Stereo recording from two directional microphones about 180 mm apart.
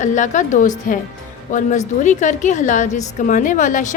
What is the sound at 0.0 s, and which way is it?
A woman's voice, 45° left (ahead or behind).